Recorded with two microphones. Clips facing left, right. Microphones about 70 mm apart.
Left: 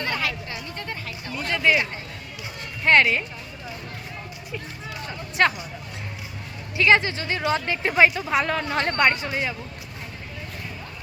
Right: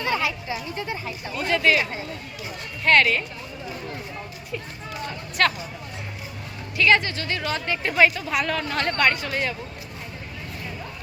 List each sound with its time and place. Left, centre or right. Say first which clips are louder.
0.0 s speech: right 2 dB; centre
2.8 s speech: even; left
5.4 s speech: left 1 dB; centre
6.7 s speech: left 1 dB; left